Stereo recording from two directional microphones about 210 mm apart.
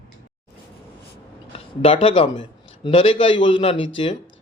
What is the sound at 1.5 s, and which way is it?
Speech, 25° left (ahead or behind).